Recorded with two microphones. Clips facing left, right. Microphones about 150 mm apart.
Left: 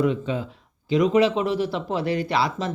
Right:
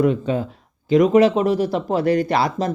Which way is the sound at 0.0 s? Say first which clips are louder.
Right 4 dB; 50° right (ahead or behind).